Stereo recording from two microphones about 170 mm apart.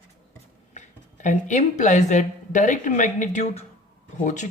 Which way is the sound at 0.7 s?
45° left (ahead or behind).